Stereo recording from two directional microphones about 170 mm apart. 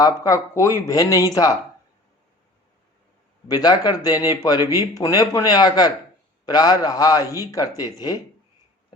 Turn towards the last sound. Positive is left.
turn(degrees=20)  # may be behind; listen again after turning